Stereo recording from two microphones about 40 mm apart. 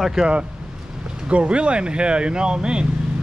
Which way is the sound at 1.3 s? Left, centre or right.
Right.